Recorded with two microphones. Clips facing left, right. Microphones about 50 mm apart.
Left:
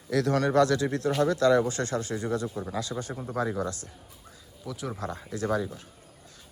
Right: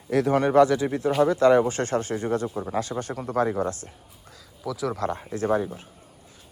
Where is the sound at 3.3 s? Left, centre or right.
Right.